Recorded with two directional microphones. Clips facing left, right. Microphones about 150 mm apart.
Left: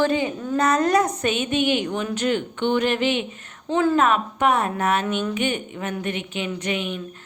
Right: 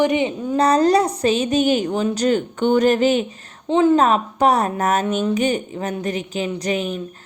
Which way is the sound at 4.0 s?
35° right (ahead or behind).